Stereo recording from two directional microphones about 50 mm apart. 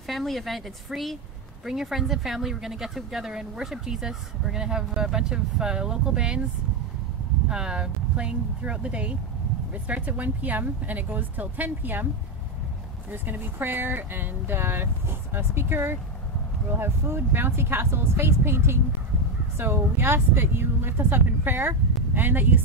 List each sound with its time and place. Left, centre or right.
0.0 s speech: centre
7.4 s speech: centre; by 12.1 s right
13.1 s speech: right